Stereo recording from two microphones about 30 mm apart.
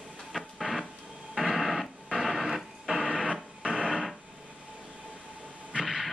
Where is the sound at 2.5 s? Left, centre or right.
Centre.